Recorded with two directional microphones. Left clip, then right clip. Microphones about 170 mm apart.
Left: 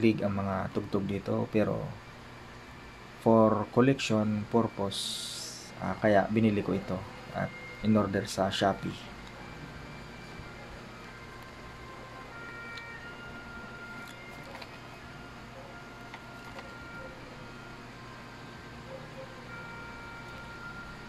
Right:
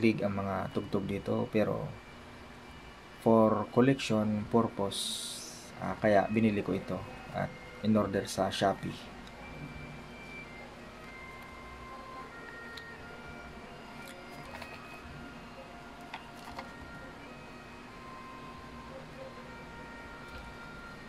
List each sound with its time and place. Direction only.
0.0 s speech: 5° left (ahead or behind)
3.3 s speech: 10° left (ahead or behind)